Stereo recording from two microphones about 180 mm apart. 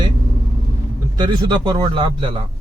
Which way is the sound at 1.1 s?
25° right (ahead or behind).